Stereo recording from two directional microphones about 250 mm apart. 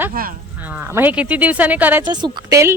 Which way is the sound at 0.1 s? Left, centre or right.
Right.